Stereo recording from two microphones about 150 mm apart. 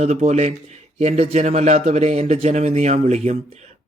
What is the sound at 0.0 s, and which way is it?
A man's voice, 45° right (ahead or behind).